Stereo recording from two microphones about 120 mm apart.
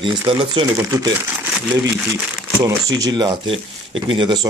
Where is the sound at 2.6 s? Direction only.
30° right (ahead or behind).